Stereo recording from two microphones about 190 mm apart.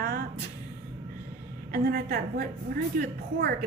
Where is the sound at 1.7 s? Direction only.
55° right (ahead or behind).